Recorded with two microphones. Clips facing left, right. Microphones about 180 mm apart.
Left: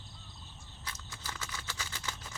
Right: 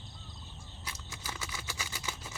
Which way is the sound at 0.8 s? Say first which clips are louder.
Right 1 dB; 10° right (ahead or behind).